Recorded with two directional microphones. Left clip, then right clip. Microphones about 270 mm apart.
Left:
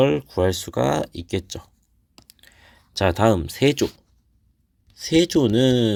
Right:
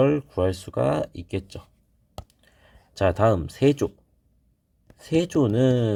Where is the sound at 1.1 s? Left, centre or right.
Left.